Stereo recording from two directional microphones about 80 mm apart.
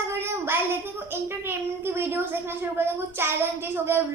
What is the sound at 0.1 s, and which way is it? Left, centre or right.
A child's voice, right.